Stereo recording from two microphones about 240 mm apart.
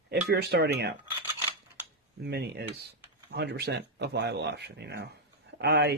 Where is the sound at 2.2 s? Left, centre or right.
Right.